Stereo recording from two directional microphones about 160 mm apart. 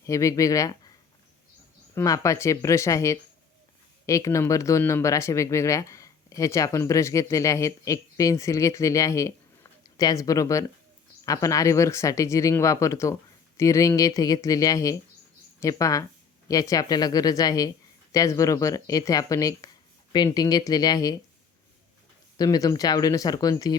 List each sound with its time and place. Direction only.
0.0 s speech: 20° left (ahead or behind)
2.0 s speech: 20° left (ahead or behind)
22.4 s speech: 20° left (ahead or behind)